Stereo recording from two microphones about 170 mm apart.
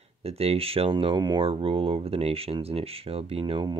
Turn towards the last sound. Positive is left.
turn(degrees=-25)  # may be behind; listen again after turning